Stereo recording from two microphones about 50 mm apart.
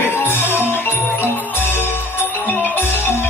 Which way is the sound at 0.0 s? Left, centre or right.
Left.